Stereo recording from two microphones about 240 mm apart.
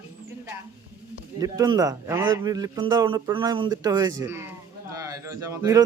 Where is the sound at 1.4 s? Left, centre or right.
Centre.